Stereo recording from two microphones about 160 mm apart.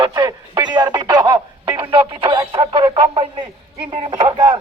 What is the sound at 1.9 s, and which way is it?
Radio, 35° right (ahead or behind).